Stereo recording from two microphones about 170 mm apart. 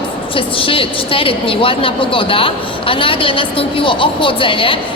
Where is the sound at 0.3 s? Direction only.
30° left (ahead or behind).